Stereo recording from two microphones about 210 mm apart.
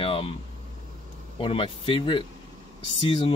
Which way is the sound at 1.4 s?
25° left (ahead or behind).